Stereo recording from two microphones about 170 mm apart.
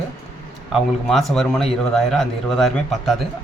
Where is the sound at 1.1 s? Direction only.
Centre (ahead or behind).